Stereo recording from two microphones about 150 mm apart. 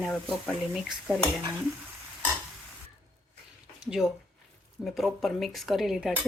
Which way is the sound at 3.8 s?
5° right (ahead or behind).